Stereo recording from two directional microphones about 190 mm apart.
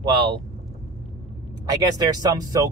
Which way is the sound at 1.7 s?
20° right (ahead or behind).